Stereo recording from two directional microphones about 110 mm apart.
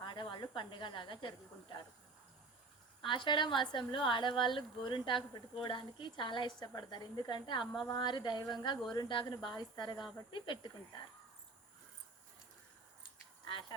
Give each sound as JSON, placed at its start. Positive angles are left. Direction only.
{"t": 0.0, "sound": "a woman's voice", "side_deg": 45}
{"t": 3.0, "sound": "a woman's voice", "side_deg": 50}
{"t": 13.5, "sound": "duck", "side_deg": 45}